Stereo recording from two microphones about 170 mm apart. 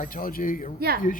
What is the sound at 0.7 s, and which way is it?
Speech, 65° right (ahead or behind).